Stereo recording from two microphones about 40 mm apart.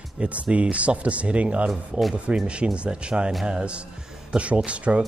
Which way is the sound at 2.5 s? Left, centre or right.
Right.